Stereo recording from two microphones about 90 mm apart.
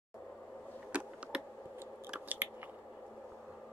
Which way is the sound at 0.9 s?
15° right (ahead or behind).